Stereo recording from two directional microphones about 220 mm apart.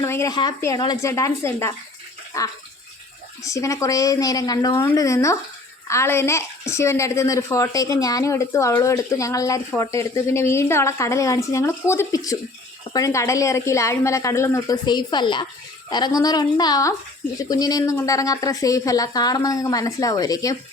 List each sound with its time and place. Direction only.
0.0 s a woman's voice: 15° left (ahead or behind)